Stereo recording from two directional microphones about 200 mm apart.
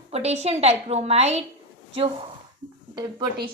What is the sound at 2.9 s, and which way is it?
Speech, 20° right (ahead or behind).